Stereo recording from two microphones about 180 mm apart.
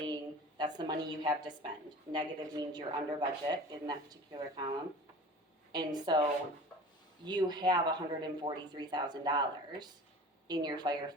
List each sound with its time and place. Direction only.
0.0 s a sound: 25° right (ahead or behind)
2.1 s speech: 25° right (ahead or behind)
5.7 s speech: 25° right (ahead or behind)
7.3 s speech: 25° right (ahead or behind)